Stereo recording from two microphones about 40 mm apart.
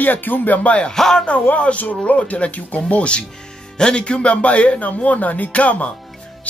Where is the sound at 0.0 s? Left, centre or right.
Left.